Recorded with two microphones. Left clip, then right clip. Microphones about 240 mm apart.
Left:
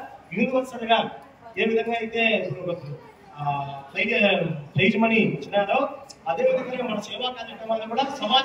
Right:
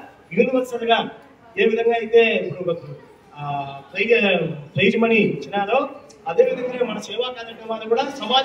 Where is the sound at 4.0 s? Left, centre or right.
Centre.